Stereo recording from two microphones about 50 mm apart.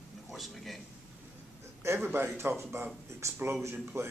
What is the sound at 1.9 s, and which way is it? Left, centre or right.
Speech, right.